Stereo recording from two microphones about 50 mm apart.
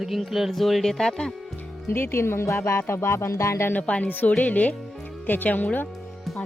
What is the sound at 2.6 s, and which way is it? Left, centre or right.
Music, left.